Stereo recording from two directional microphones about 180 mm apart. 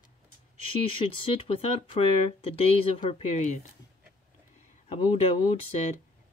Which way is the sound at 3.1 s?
35° left (ahead or behind).